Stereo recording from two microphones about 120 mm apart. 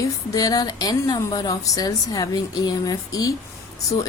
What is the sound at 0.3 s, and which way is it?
A woman's voice, 30° left (ahead or behind).